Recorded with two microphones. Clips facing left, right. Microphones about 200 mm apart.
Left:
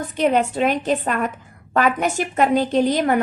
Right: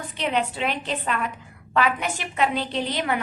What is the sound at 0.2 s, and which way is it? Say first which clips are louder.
A woman's voice: left 7 dB; 45° left (ahead or behind).